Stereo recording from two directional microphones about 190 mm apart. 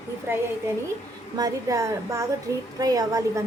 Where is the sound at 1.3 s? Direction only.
20° right (ahead or behind).